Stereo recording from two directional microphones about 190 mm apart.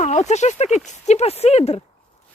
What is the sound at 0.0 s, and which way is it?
Speech, 35° left (ahead or behind).